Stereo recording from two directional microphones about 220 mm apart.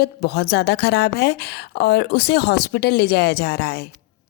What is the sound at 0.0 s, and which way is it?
A woman's voice, 45° left (ahead or behind).